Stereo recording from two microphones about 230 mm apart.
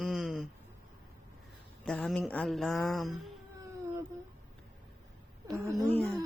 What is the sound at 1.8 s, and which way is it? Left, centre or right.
Speech, centre.